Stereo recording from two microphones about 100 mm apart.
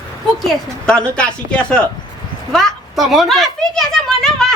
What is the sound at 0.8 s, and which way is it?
A child's voice, 10° left (ahead or behind).